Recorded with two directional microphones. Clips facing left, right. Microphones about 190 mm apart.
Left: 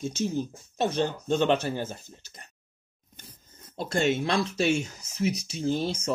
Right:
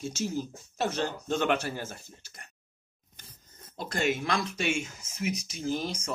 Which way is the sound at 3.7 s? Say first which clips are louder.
Left 4 dB; 25° left (ahead or behind).